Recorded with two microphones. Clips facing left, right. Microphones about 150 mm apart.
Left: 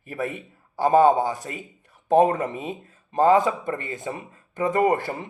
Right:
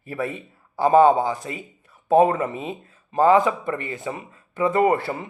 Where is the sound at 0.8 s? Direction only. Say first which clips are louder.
Right 2 dB; 40° left (ahead or behind).